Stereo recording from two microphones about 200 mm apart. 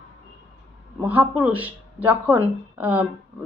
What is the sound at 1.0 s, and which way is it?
Speech, 10° right (ahead or behind).